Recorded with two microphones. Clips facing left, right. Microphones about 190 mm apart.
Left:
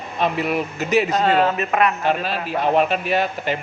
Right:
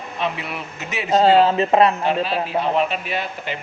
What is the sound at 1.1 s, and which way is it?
Speech, 30° right (ahead or behind).